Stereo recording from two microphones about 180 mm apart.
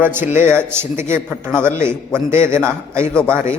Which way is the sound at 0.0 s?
10° right (ahead or behind).